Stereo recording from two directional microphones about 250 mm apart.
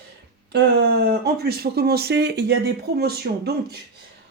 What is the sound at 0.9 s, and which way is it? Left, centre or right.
Speech, right.